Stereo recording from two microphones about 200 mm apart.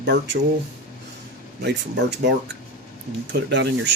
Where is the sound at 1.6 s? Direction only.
55° right (ahead or behind).